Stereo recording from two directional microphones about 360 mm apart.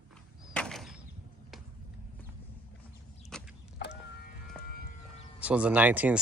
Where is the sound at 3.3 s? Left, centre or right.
Centre.